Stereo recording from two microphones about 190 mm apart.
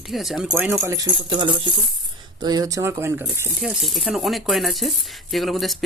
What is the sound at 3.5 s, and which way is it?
Speech, centre (ahead or behind).